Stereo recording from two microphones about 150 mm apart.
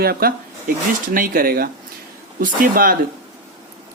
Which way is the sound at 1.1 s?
75° right (ahead or behind).